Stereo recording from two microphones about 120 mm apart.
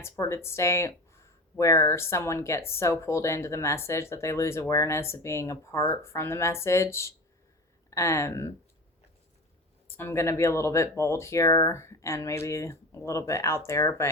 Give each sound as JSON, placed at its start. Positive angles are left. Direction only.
{"t": 0.0, "sound": "speech", "side_deg": 20}
{"t": 9.8, "sound": "speech", "side_deg": 20}